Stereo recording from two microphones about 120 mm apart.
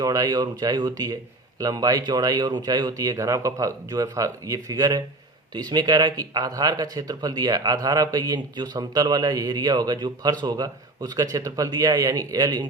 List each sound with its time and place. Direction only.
0.0 s a man's voice: 30° right (ahead or behind)